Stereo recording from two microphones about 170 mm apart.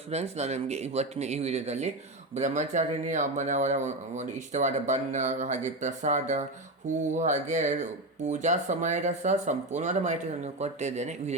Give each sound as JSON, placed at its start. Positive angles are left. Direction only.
{"t": 0.1, "sound": "speech", "side_deg": -40}